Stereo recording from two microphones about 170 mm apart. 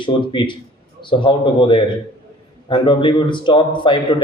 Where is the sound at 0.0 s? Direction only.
30° left (ahead or behind).